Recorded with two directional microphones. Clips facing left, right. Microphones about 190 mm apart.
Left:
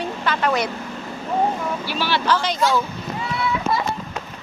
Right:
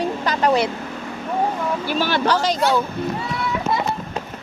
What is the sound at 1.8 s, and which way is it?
Vehicle, 45° right (ahead or behind).